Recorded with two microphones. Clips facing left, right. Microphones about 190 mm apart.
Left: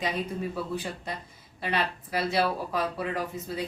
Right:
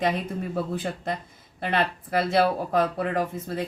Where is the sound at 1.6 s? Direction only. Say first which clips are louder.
Right 4 dB; 50° right (ahead or behind).